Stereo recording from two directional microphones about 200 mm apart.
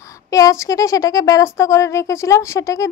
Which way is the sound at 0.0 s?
15° left (ahead or behind).